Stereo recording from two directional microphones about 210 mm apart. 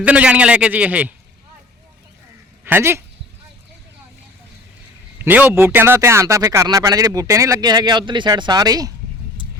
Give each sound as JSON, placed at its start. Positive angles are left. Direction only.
{"t": 0.0, "sound": "a man's voice", "side_deg": -5}
{"t": 2.6, "sound": "speech", "side_deg": -10}
{"t": 5.2, "sound": "speech", "side_deg": -10}